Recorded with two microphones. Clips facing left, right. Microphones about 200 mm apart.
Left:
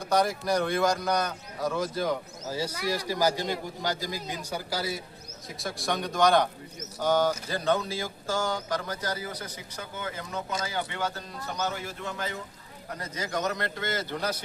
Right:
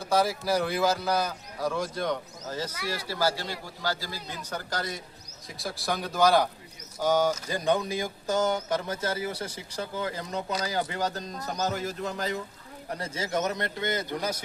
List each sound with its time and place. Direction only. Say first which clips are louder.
0.0 s a man's voice: even; 5° right (ahead or behind); by 12.4 s 35° right (ahead or behind)
13.0 s speech: right 2 dB; 25° right (ahead or behind)